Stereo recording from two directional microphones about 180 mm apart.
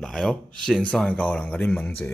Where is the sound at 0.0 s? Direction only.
Centre (ahead or behind).